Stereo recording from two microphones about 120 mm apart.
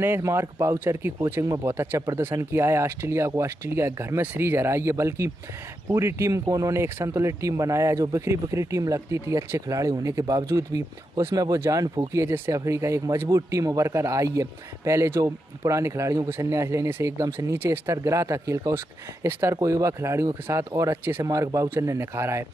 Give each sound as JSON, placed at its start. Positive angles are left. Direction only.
{"t": 0.0, "sound": "speech", "side_deg": -20}